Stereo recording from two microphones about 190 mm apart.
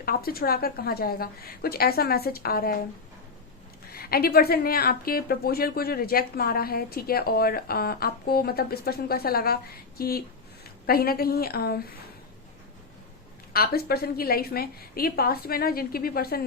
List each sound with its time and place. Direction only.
0.0 s a woman's voice: 50° left (ahead or behind)
3.9 s a woman's voice: 55° left (ahead or behind)
13.5 s a woman's voice: 55° left (ahead or behind)